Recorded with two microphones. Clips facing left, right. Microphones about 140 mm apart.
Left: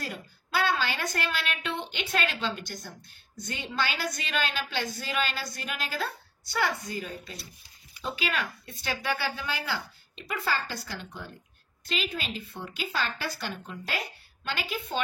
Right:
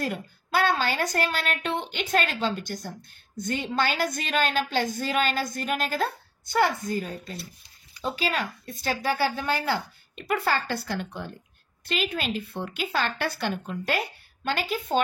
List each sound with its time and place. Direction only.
0.0 s a woman's voice: 50° right (ahead or behind)